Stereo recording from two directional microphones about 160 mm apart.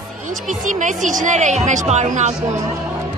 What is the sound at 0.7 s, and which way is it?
A woman's voice, 55° right (ahead or behind).